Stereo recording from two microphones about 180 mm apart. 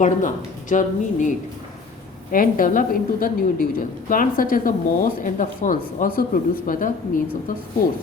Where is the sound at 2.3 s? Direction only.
50° left (ahead or behind).